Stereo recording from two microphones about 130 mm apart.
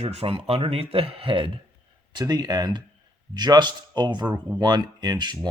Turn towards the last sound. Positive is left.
turn(degrees=-35)  # may be behind; listen again after turning